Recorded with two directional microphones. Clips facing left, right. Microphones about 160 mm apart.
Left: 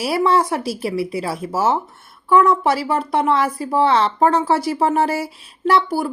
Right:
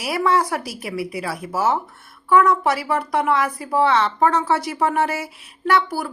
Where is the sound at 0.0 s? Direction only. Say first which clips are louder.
Left 3 dB; 30° left (ahead or behind).